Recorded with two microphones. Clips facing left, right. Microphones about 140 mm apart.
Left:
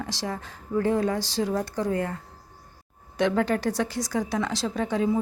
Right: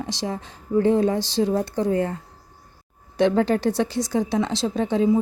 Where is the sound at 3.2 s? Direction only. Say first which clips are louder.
Right 4 dB; 30° right (ahead or behind).